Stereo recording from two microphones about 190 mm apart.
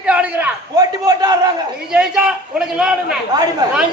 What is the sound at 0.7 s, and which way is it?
Speech, 20° right (ahead or behind).